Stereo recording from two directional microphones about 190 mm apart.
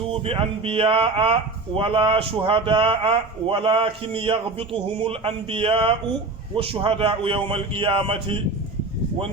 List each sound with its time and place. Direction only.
0.1 s speech: 30° right (ahead or behind)